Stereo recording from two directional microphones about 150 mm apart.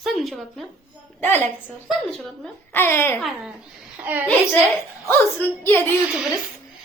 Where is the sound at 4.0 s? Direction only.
15° right (ahead or behind).